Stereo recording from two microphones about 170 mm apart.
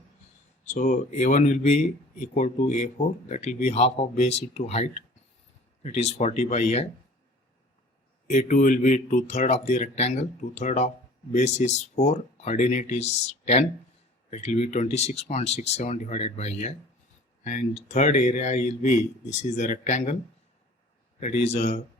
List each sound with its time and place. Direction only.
0.6 s speech: 45° left (ahead or behind)
8.3 s speech: 45° left (ahead or behind)
21.2 s speech: 40° left (ahead or behind)